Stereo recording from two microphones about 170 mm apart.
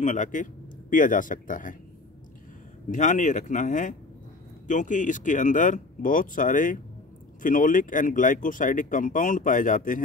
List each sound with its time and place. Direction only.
0.0 s speech: 45° left (ahead or behind)
2.9 s speech: 50° left (ahead or behind)